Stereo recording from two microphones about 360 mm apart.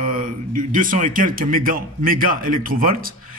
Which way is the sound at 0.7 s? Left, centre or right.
Right.